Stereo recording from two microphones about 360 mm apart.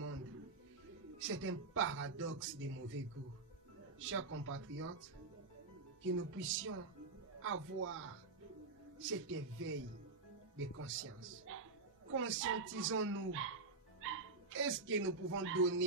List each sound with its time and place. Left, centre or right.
1.2 s a man's voice: right
4.0 s a man's voice: right
6.0 s a man's voice: right